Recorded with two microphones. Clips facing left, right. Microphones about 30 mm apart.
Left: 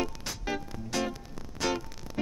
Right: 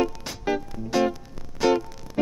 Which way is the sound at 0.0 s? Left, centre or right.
Centre.